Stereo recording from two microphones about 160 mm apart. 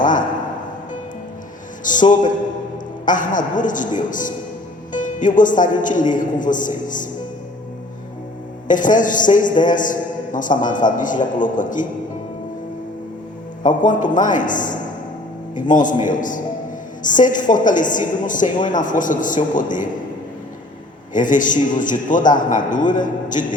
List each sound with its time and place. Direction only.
0.0 s music: 55° left (ahead or behind)
1.8 s a woman's voice: 55° left (ahead or behind)
8.6 s a woman's voice: 55° left (ahead or behind)
13.6 s a woman's voice: 55° left (ahead or behind)
21.1 s a woman's voice: 55° left (ahead or behind)